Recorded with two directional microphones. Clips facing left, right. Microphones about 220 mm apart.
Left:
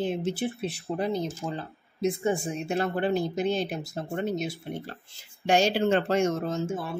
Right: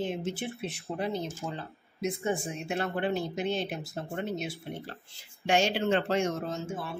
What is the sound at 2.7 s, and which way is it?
Speech, 35° left (ahead or behind).